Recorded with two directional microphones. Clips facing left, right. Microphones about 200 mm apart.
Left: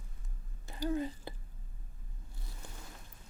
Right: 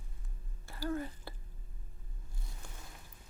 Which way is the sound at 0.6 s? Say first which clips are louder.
Left 3 dB; 20° left (ahead or behind).